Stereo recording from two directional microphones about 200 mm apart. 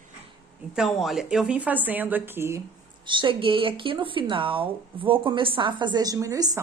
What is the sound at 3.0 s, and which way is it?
A woman's voice, 25° right (ahead or behind).